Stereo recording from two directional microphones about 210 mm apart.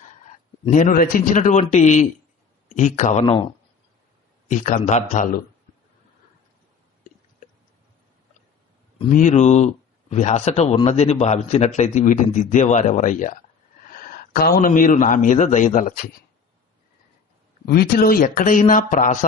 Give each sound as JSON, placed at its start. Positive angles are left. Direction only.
{"t": 0.0, "sound": "a man's voice", "side_deg": 35}
{"t": 4.4, "sound": "a man's voice", "side_deg": 35}
{"t": 9.0, "sound": "a man's voice", "side_deg": 35}
{"t": 17.7, "sound": "a man's voice", "side_deg": 45}